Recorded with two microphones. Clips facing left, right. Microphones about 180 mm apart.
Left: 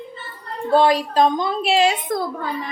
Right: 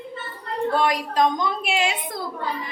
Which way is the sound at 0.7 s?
30° left (ahead or behind).